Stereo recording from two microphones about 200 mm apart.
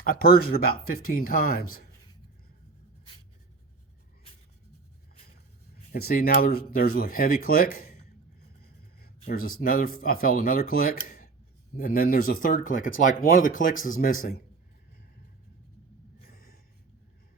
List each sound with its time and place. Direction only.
0.0 s speech: 45° left (ahead or behind)
5.7 s speech: 50° left (ahead or behind)
16.3 s a sound: 50° left (ahead or behind)